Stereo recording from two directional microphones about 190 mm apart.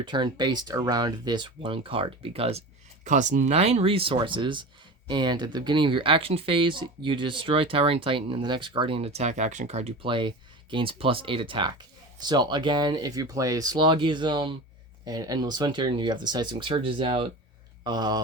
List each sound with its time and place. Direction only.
0.0 s speech: 25° right (ahead or behind)